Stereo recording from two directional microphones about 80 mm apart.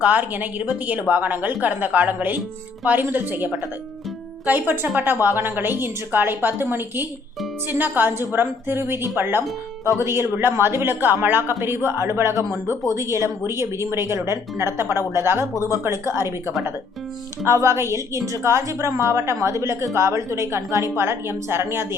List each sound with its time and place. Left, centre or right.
0.0 s a woman's voice: right
17.4 s a woman's voice: right